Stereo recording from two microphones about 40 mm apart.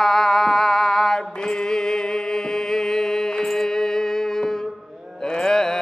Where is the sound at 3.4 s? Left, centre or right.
Centre.